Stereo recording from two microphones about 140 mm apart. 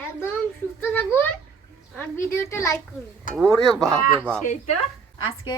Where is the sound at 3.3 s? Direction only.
5° left (ahead or behind).